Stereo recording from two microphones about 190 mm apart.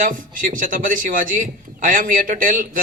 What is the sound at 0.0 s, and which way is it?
A man's voice, 45° right (ahead or behind).